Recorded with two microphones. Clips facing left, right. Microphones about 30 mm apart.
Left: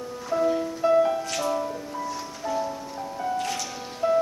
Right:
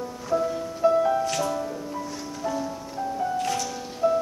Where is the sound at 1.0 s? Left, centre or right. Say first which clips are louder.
Right 2 dB; centre.